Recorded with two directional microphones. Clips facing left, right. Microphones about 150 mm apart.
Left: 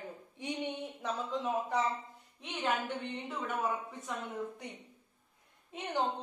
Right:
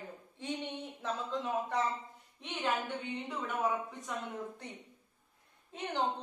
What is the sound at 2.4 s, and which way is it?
Speech, centre (ahead or behind).